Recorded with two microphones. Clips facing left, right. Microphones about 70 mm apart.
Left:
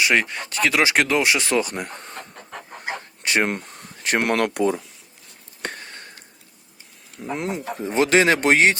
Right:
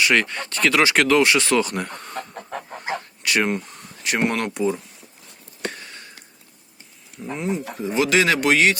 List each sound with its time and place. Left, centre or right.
0.0 s speech: centre
3.4 s a sound: left
4.3 s speech: left
5.6 s a sound: left
7.3 s speech: left
7.6 s speech: left